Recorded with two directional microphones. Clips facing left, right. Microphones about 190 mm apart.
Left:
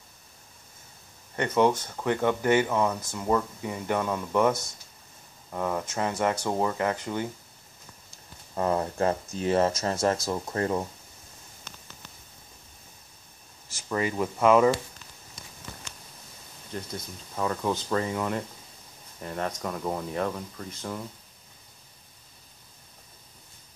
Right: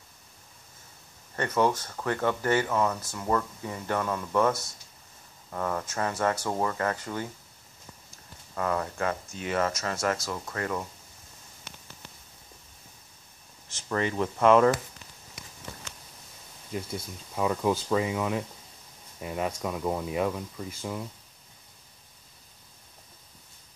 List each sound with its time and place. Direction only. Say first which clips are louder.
1.3 s speech: left 3 dB; 20° left (ahead or behind)
8.5 s speech: left 3 dB; 25° left (ahead or behind)
13.8 s speech: even; 5° left (ahead or behind)
16.7 s speech: right 2 dB; 10° right (ahead or behind)